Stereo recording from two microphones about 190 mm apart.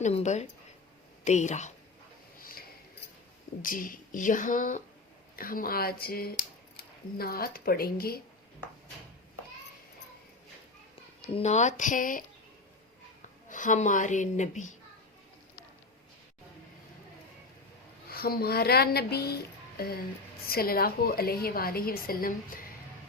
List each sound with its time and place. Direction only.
0.0 s a woman's voice: 35° left (ahead or behind)
2.4 s a sound: 50° left (ahead or behind)
3.6 s a woman's voice: 45° left (ahead or behind)
11.3 s a woman's voice: 35° left (ahead or behind)
13.5 s a woman's voice: 45° left (ahead or behind)
18.1 s a woman's voice: 55° left (ahead or behind)